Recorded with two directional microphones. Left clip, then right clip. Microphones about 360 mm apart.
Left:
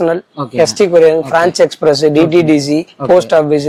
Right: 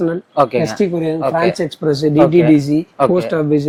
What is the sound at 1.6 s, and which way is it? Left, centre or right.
Speech, left.